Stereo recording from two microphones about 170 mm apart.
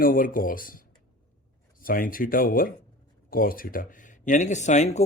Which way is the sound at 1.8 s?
55° left (ahead or behind).